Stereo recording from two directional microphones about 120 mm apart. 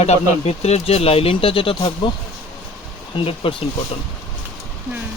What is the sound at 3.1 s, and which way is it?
Speech, 45° left (ahead or behind).